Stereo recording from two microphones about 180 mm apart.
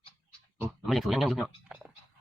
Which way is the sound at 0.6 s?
Centre (ahead or behind).